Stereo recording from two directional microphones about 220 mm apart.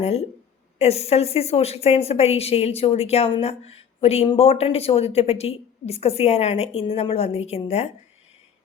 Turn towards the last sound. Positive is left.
turn(degrees=30)  # may be behind; listen again after turning